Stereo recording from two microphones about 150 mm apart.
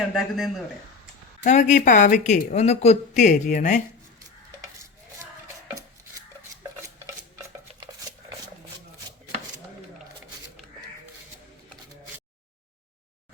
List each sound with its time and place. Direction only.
0.1 s speech: centre (ahead or behind)
1.5 s speech: 55° left (ahead or behind)